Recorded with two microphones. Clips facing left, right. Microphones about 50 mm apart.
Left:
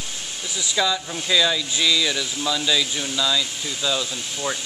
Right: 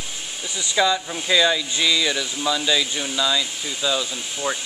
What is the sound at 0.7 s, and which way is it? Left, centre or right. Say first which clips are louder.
Speech: right 3 dB; centre.